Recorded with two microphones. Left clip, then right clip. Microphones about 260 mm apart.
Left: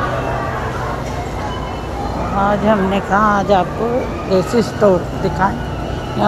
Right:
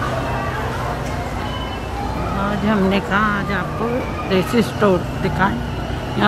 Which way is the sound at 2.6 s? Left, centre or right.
Centre.